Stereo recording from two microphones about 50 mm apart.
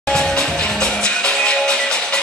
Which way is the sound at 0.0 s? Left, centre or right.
Centre.